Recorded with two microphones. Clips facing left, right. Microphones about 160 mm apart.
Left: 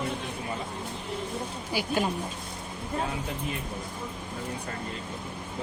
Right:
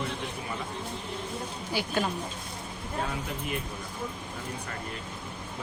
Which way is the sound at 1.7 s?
10° left (ahead or behind).